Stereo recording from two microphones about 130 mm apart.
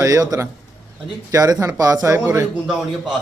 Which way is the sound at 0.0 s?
25° right (ahead or behind).